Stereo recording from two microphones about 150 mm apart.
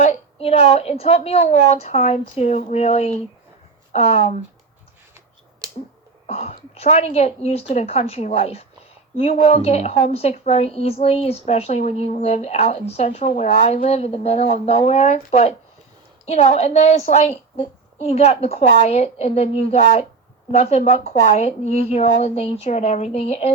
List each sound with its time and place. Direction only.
0.0 s a woman's voice: 45° left (ahead or behind)
6.2 s a woman's voice: 45° left (ahead or behind)